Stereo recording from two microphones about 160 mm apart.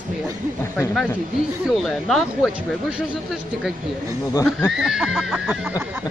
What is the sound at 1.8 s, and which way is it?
A woman's voice, 5° left (ahead or behind).